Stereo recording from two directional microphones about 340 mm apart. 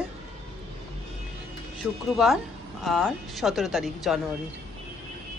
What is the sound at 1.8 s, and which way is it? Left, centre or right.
Speech, centre.